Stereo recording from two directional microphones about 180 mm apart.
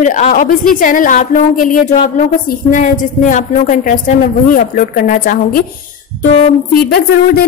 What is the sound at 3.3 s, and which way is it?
Speech, 45° left (ahead or behind).